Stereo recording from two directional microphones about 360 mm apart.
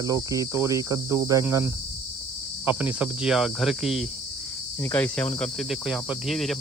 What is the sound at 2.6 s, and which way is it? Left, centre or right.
Speech, centre.